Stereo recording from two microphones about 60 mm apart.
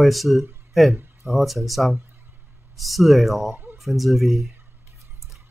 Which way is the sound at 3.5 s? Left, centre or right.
Right.